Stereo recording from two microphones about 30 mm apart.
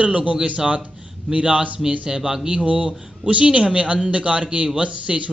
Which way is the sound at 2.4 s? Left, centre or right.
Right.